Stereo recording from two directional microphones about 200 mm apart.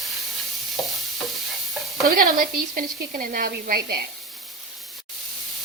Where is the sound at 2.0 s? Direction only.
45° right (ahead or behind).